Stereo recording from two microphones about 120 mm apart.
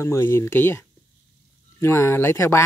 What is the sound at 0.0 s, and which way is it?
Speech, 20° left (ahead or behind).